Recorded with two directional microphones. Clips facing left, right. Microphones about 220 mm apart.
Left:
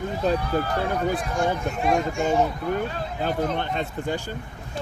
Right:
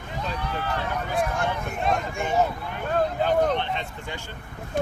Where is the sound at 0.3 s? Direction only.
40° left (ahead or behind).